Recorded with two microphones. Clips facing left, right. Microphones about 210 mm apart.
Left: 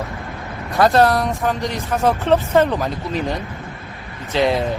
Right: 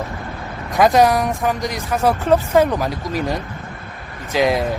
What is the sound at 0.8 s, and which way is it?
Speech, 15° right (ahead or behind).